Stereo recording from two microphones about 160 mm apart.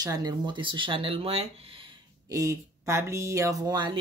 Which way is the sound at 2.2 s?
20° right (ahead or behind).